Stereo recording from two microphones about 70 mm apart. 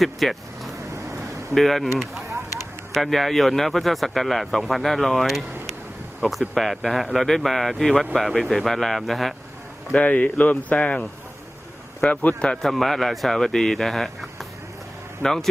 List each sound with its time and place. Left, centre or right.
0.0 s speech: centre
2.9 s speech: centre
9.9 s a man's voice: centre
12.6 s a man's voice: centre